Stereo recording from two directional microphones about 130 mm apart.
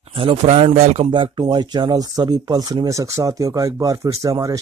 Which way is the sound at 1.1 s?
40° right (ahead or behind).